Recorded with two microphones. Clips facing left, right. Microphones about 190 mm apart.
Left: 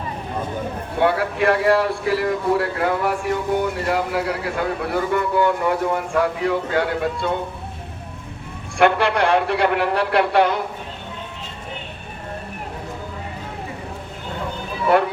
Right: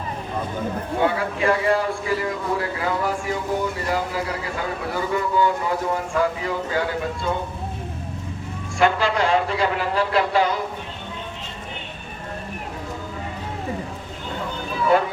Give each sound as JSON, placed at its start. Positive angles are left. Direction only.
{"t": 1.0, "sound": "speech", "side_deg": 65}
{"t": 8.8, "sound": "speech", "side_deg": 65}